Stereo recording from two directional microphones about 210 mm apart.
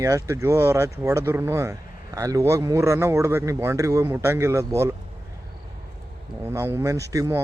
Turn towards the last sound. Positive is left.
turn(degrees=-15)  # may be behind; listen again after turning